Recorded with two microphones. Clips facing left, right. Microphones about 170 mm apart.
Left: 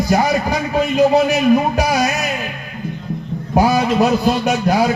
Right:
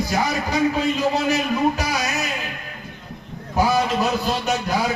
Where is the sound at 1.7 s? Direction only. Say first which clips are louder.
Left 8 dB; 60° left (ahead or behind).